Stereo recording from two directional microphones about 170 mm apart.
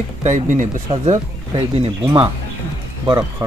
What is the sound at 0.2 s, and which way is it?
Speech, 45° right (ahead or behind).